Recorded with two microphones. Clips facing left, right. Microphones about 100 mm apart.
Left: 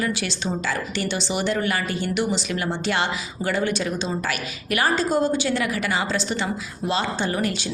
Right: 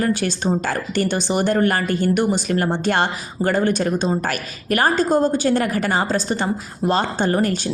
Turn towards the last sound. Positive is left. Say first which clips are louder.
# right 5 dB
turn(degrees=-45)  # may be behind; listen again after turning